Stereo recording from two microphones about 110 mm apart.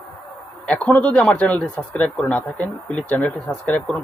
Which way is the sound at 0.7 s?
10° left (ahead or behind).